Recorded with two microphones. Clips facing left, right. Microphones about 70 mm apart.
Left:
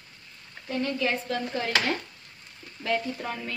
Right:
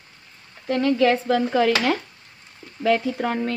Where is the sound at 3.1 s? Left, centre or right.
Right.